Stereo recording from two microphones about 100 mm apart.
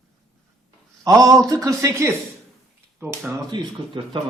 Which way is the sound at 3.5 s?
50° right (ahead or behind).